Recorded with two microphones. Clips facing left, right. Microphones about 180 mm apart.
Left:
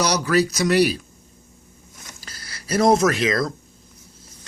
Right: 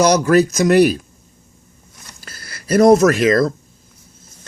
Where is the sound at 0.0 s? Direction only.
50° right (ahead or behind).